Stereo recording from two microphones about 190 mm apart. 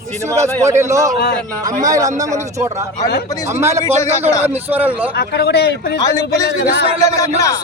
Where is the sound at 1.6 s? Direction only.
20° right (ahead or behind).